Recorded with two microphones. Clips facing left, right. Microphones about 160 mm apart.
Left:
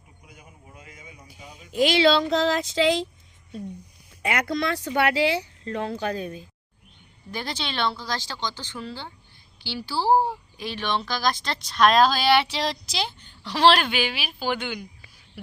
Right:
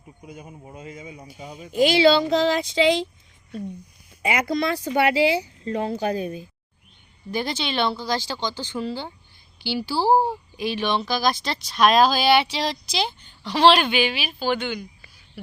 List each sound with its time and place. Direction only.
0.7 s a man's voice: 30° right (ahead or behind)
1.7 s speech: centre (ahead or behind)
4.2 s speech: centre (ahead or behind)